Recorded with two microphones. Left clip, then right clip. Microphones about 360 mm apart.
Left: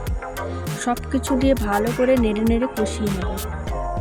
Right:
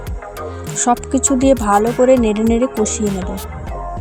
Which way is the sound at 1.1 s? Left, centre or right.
Centre.